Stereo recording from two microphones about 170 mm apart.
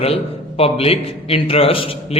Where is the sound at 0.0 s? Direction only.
35° left (ahead or behind).